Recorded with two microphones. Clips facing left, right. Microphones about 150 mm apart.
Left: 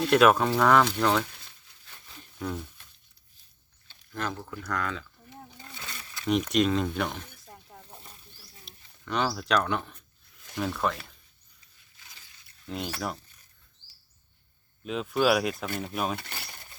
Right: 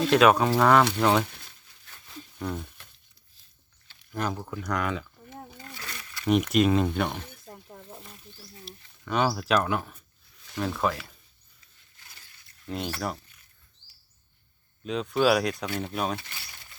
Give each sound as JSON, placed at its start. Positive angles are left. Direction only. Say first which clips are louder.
{"t": 0.1, "sound": "speech", "louder": "even", "side_deg": 0}
{"t": 4.1, "sound": "speech", "louder": "right 3 dB", "side_deg": -15}
{"t": 5.7, "sound": "a sound", "louder": "left 2 dB", "side_deg": 20}
{"t": 6.5, "sound": "speech", "louder": "right 3 dB", "side_deg": -5}
{"t": 7.5, "sound": "a sound", "louder": "right 4 dB", "side_deg": -60}
{"t": 8.6, "sound": "speech", "louder": "right 1 dB", "side_deg": -5}
{"t": 12.6, "sound": "speech", "louder": "right 2 dB", "side_deg": 0}
{"t": 14.8, "sound": "speech", "louder": "right 1 dB", "side_deg": 0}
{"t": 16.1, "sound": "speech", "louder": "even", "side_deg": 55}